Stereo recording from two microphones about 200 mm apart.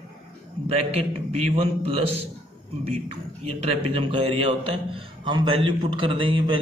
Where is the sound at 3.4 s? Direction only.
30° right (ahead or behind).